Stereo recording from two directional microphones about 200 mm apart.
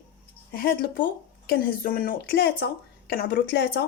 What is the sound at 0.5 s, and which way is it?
Speech, 45° left (ahead or behind).